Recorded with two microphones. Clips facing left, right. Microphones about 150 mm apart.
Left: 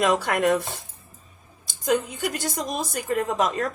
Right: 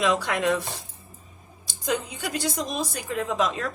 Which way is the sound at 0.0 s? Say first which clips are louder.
Left 2 dB; 45° left (ahead or behind).